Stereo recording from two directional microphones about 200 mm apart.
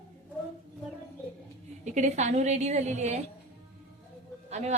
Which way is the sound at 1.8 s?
35° right (ahead or behind).